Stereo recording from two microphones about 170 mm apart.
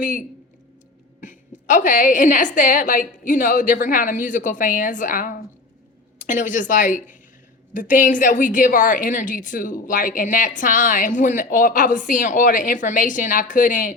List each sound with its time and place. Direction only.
0.0 s a woman's voice: 55° left (ahead or behind)